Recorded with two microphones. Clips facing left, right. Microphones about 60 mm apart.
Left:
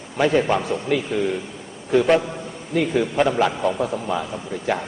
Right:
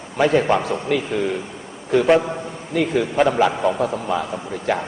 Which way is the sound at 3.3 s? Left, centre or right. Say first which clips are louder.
Right 2 dB; centre.